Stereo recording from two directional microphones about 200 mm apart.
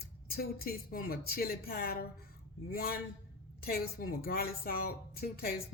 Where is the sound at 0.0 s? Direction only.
50° left (ahead or behind).